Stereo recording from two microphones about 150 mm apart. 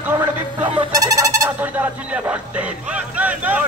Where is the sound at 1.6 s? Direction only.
10° right (ahead or behind).